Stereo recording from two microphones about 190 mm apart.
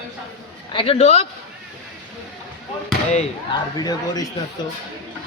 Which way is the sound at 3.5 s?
20° left (ahead or behind).